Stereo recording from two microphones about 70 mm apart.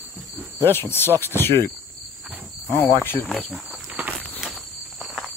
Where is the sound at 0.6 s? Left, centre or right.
Left.